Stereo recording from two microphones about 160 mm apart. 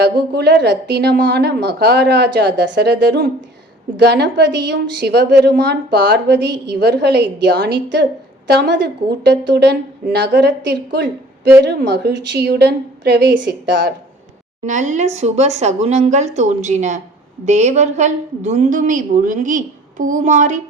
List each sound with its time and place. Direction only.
0.0 s a woman's voice: 90° right
14.6 s a woman's voice: 50° right (ahead or behind)